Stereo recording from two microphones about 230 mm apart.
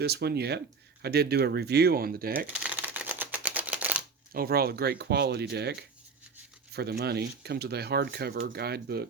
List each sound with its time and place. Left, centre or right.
0.0 s speech: right
2.5 s typewriter: centre
4.4 s speech: right